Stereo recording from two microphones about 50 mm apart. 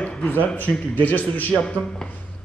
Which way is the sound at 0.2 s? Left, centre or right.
Left.